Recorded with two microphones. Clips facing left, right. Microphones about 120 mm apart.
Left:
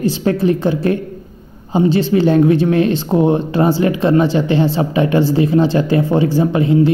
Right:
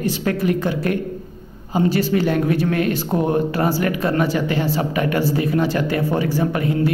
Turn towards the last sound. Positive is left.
turn(degrees=25)  # may be behind; listen again after turning